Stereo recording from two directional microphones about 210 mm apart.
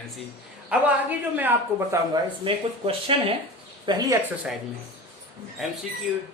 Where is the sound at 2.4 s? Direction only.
25° right (ahead or behind).